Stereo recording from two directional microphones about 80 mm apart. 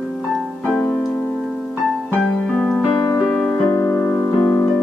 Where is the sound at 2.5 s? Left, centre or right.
Centre.